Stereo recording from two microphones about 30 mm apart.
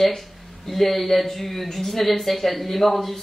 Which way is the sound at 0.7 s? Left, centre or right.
Centre.